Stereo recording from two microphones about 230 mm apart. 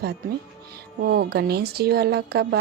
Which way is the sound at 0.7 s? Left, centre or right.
Right.